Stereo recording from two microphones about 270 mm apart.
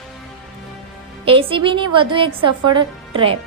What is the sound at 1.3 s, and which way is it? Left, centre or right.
A woman's voice, centre.